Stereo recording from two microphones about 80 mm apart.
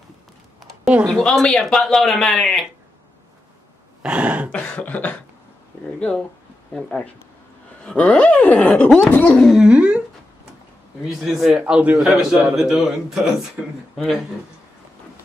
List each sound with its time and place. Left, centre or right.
1.2 s speech: centre
4.0 s throat clearing: centre
4.5 s cough: centre
5.9 s speech: centre
6.7 s a sound: centre
9.4 s speech: centre
9.7 s a sound: centre
11.1 s speech: centre